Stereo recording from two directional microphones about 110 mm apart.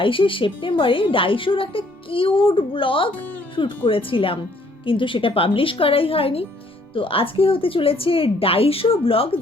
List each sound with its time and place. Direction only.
0.0 s a woman's voice: 50° left (ahead or behind)